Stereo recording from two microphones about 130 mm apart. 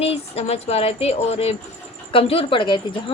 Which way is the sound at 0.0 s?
50° left (ahead or behind).